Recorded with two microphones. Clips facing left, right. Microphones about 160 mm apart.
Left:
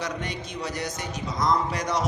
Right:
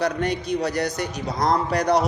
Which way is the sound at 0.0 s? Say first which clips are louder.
Right 8 dB; 65° right (ahead or behind).